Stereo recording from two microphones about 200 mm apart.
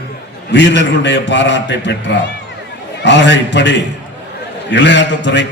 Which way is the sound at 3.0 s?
60° left (ahead or behind).